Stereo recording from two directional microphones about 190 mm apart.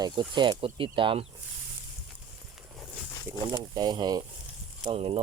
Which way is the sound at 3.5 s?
20° right (ahead or behind).